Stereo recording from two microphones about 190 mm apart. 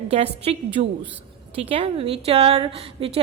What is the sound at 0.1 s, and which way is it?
A woman's voice, 30° right (ahead or behind).